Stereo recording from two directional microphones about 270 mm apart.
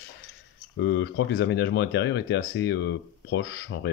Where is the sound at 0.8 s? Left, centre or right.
Left.